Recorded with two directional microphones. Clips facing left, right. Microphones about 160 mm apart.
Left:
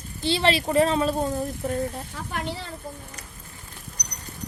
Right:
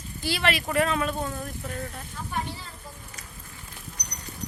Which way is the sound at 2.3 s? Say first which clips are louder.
Left 1 dB; 80° left.